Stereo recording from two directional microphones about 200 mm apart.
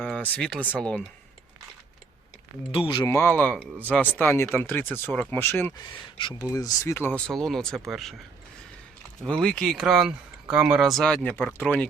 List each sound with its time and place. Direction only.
0.0 s speech: 5° left (ahead or behind)
2.7 s speech: 20° left (ahead or behind); by 8.1 s centre (ahead or behind)
9.2 s speech: 5° left (ahead or behind)